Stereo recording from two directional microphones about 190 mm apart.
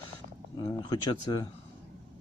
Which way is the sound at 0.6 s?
25° left (ahead or behind).